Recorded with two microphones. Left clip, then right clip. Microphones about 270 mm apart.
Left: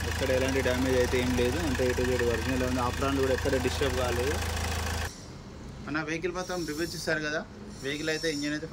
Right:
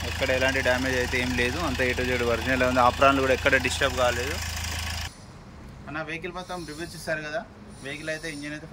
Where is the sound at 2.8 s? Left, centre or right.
Right.